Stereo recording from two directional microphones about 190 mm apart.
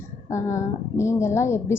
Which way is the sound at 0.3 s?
15° left (ahead or behind).